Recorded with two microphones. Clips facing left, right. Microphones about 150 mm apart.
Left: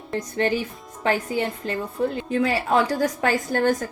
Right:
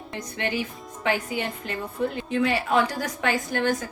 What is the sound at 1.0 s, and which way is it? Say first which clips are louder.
A woman's voice: left 3 dB; 30° left (ahead or behind).